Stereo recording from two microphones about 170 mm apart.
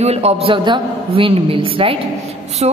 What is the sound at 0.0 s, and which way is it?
A woman's voice, 40° right (ahead or behind).